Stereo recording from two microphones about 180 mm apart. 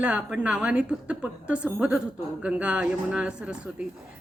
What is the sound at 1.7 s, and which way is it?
A man's voice, 5° right (ahead or behind).